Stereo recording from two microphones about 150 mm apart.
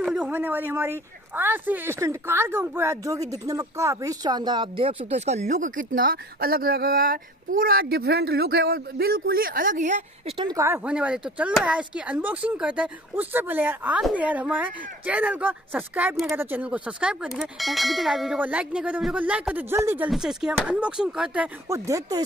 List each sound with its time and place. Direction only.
0.0 s speech: 5° right (ahead or behind); by 10.0 s 55° right (ahead or behind)
10.2 s speech: 35° right (ahead or behind)
10.6 s speech: 15° right (ahead or behind)
20.1 s speech: 5° right (ahead or behind)
21.6 s speech: 20° right (ahead or behind)